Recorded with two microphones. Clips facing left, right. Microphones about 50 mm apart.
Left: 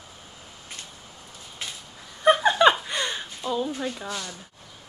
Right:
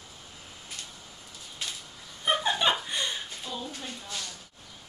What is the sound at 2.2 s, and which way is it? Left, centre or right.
Laughter, left.